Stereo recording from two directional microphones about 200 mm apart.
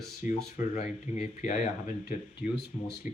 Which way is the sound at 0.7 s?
40° left (ahead or behind).